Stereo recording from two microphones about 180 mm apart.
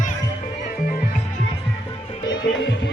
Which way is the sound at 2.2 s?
80° left.